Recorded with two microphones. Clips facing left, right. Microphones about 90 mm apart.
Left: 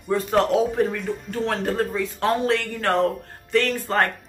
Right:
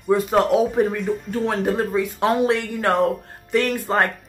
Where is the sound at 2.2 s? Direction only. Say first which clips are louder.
Right 2 dB; 15° right (ahead or behind).